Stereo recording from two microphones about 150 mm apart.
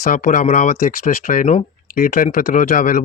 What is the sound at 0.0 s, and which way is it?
Speech, 65° left (ahead or behind).